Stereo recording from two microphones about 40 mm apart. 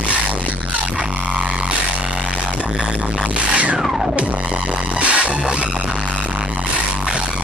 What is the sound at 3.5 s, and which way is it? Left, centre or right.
Music, right.